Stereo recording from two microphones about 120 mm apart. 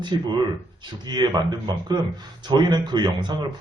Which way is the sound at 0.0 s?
40° right (ahead or behind).